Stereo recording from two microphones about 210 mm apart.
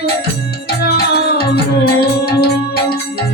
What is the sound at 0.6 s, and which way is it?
Music, 50° left (ahead or behind).